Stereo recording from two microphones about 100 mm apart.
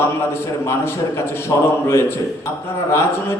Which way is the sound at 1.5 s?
35° left (ahead or behind).